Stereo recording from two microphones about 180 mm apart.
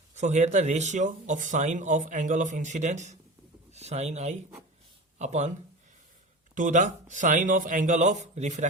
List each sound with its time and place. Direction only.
0.1 s speech: 40° right (ahead or behind)
6.5 s speech: 45° right (ahead or behind)